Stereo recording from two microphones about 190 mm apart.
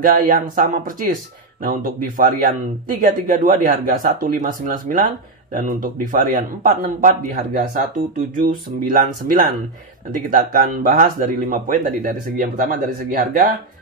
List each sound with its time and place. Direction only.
0.0 s speech: 50° right (ahead or behind)